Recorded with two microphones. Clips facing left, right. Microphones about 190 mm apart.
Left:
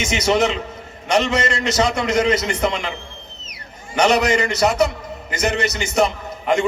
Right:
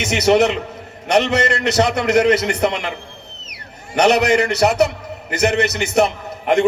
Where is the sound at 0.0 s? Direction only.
65° right (ahead or behind).